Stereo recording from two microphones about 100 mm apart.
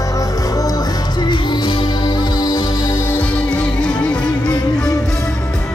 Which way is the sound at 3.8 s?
10° left (ahead or behind).